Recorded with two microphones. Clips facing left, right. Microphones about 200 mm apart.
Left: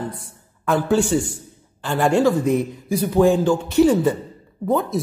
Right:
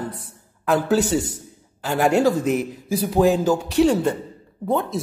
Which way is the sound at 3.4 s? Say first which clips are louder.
Left 2 dB; centre (ahead or behind).